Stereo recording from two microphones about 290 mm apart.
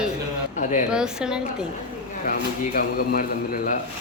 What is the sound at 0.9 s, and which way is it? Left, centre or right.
Speech, centre.